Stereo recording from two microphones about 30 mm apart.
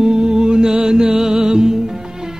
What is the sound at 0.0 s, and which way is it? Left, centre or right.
Music, right.